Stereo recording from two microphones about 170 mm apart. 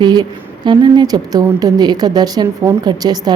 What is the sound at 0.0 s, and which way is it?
A woman's voice, 25° right (ahead or behind).